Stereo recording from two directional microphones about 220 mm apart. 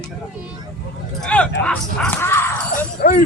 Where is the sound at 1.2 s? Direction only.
5° left (ahead or behind).